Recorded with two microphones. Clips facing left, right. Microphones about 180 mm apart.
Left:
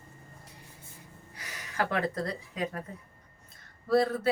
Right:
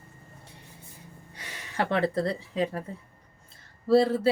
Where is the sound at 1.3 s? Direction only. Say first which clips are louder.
Right 1 dB; 30° right (ahead or behind).